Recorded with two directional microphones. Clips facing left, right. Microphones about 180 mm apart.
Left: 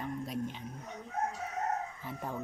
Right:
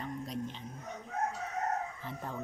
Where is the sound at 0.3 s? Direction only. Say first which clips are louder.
Left 2 dB; 10° left (ahead or behind).